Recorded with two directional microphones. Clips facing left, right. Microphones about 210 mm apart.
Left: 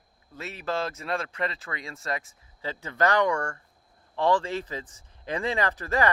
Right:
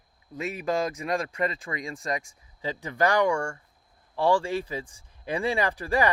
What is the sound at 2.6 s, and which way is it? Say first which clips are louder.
Speech: right 1 dB; 15° right (ahead or behind).